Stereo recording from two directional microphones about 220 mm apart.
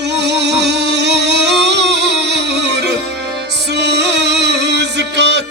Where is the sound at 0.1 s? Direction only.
50° right (ahead or behind).